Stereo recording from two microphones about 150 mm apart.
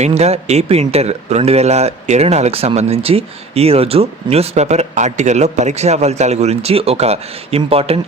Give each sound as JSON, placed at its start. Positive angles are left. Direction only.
{"t": 0.0, "sound": "speech", "side_deg": -45}